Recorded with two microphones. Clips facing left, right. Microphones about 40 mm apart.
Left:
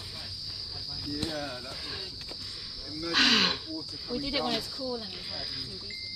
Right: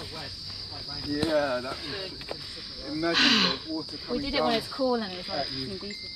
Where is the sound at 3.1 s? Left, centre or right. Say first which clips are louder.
Right 1 dB; centre.